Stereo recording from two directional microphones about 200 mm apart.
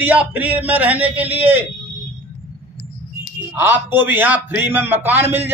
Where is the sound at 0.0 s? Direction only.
10° right (ahead or behind).